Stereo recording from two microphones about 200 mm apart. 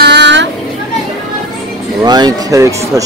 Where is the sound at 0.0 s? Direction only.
60° right (ahead or behind).